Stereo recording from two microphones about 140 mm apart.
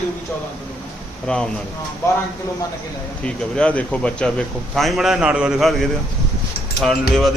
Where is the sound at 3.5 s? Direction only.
10° left (ahead or behind).